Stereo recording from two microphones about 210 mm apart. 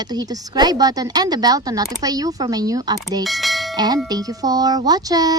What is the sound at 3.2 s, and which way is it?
Bell, centre (ahead or behind).